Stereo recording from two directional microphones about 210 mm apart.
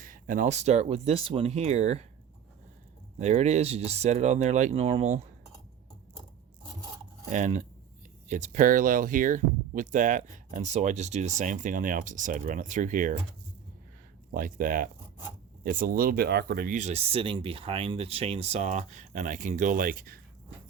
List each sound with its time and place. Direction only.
0.0 s speech: 40° right (ahead or behind)
3.2 s speech: 35° right (ahead or behind)
7.3 s speech: 35° right (ahead or behind)
14.3 s speech: 40° right (ahead or behind)